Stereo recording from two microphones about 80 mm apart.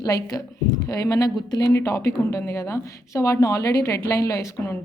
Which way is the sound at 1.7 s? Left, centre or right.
Left.